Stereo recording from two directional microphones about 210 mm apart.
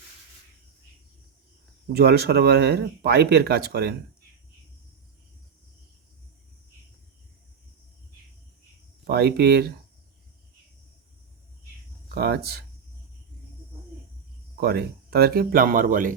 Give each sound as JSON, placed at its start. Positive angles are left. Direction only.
{"t": 1.9, "sound": "speech", "side_deg": -50}
{"t": 9.0, "sound": "speech", "side_deg": -50}
{"t": 12.1, "sound": "speech", "side_deg": -50}
{"t": 14.6, "sound": "speech", "side_deg": -50}